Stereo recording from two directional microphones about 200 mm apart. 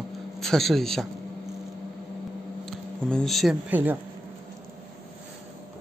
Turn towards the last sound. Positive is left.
turn(degrees=-10)  # may be behind; listen again after turning